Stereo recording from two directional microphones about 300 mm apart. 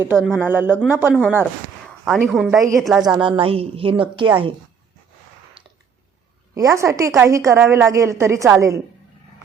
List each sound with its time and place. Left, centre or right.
0.0 s a woman's voice: centre
3.2 s a woman's voice: centre
6.5 s a woman's voice: centre